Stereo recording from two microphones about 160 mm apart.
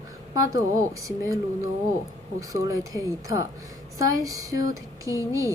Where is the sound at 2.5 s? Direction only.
20° right (ahead or behind).